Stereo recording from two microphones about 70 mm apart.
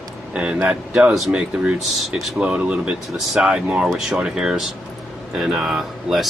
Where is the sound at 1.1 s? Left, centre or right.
Centre.